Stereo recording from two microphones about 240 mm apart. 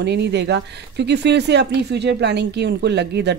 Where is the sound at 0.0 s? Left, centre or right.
Right.